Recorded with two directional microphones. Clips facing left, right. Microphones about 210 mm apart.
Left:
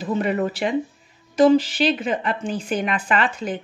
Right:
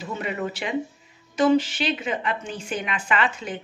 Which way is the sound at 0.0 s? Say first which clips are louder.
Left 7 dB; 40° left (ahead or behind).